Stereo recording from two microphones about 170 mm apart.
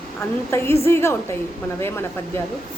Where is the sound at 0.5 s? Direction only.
15° left (ahead or behind).